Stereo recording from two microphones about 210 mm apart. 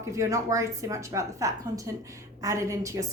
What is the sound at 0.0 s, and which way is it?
A woman's voice, 15° right (ahead or behind).